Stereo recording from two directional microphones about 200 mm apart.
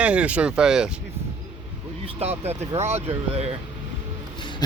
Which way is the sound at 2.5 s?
35° right (ahead or behind).